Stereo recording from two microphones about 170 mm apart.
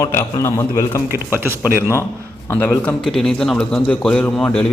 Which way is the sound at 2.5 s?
10° left (ahead or behind).